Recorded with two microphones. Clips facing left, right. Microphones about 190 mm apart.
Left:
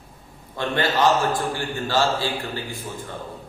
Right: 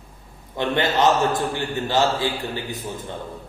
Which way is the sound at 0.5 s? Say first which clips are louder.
Right 2 dB; 20° right (ahead or behind).